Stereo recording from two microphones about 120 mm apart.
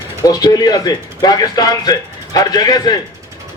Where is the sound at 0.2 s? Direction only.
30° left (ahead or behind).